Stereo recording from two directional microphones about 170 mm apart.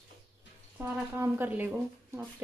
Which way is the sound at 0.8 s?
15° right (ahead or behind).